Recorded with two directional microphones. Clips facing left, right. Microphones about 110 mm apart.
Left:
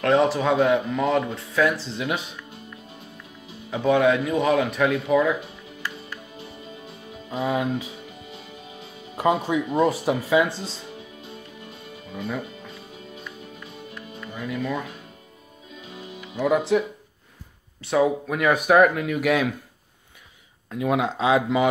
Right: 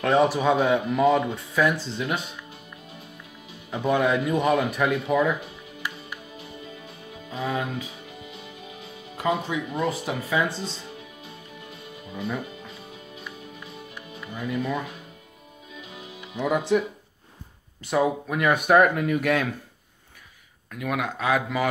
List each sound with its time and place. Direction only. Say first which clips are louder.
0.0 s speech: left 1 dB; 10° right (ahead or behind)
3.7 s speech: left 3 dB; centre (ahead or behind)
7.2 s speech: left 4 dB; 25° left (ahead or behind)
9.1 s speech: left 4 dB; 30° left (ahead or behind)
13.9 s music: left 1 dB; 10° right (ahead or behind)
16.3 s speech: left 2 dB; centre (ahead or behind)
17.8 s speech: left 2 dB; centre (ahead or behind)
20.7 s speech: left 5 dB; 25° left (ahead or behind)